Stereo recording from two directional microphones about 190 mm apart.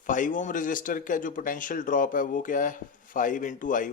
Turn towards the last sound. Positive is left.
turn(degrees=45)  # may be behind; listen again after turning